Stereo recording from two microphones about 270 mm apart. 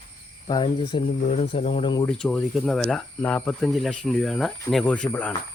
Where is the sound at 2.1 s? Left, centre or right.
Centre.